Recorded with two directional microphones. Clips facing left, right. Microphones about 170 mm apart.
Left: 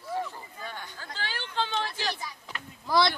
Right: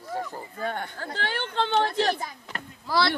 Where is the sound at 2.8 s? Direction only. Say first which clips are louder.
Even; 15° left (ahead or behind).